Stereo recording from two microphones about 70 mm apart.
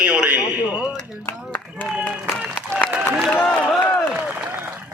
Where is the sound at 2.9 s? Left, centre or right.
Centre.